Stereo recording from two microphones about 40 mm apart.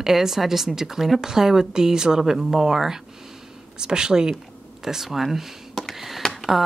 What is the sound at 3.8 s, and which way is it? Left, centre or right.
Speech, centre.